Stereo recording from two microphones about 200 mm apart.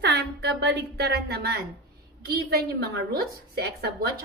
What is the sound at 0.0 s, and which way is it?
A woman's voice, 60° right (ahead or behind).